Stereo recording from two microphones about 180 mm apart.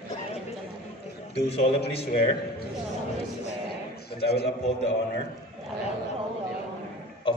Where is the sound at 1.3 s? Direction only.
35° left (ahead or behind).